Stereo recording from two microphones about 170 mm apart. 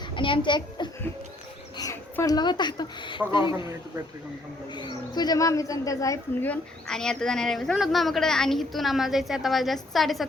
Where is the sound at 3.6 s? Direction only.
15° right (ahead or behind).